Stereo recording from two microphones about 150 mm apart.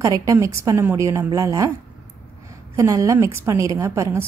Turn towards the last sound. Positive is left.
turn(degrees=-20)  # may be behind; listen again after turning